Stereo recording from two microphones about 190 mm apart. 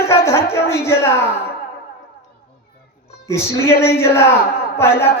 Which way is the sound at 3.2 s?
15° left (ahead or behind).